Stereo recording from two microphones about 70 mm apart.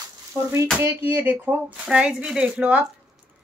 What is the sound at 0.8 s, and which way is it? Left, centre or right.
Speech, right.